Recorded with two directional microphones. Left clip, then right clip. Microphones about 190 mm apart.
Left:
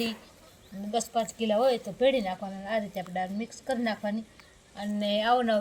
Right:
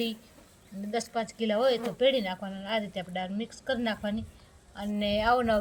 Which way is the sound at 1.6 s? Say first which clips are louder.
Right 1 dB; 10° right (ahead or behind).